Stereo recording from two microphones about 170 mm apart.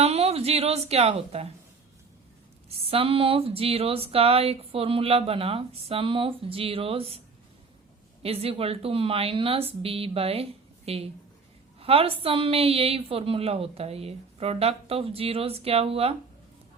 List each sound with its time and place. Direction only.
0.0 s speech: 35° right (ahead or behind)
2.6 s speech: 35° right (ahead or behind)
8.2 s speech: 35° right (ahead or behind)